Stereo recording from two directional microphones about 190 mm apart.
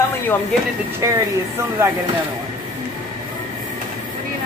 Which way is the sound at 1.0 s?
15° right (ahead or behind).